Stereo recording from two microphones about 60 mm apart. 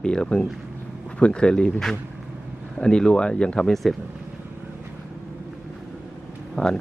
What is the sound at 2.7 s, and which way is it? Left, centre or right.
Speech, centre.